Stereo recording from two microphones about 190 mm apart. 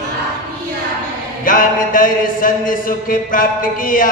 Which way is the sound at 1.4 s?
45° left (ahead or behind).